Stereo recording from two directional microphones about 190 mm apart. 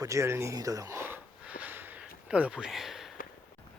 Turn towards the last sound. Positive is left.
turn(degrees=0)  # may be behind; listen again after turning